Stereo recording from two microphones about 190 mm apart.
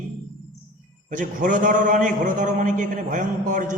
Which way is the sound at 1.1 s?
45° right (ahead or behind).